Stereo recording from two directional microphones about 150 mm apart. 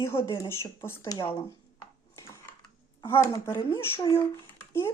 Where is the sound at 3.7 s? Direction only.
30° left (ahead or behind).